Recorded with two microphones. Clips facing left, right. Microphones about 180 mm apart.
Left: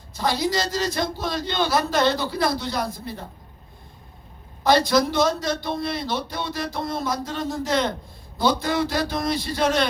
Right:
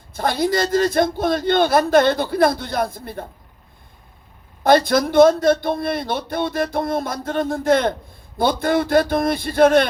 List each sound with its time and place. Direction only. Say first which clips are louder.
0.1 s speech: right 4 dB; 55° right (ahead or behind)
4.6 s speech: right 3 dB; 55° right (ahead or behind)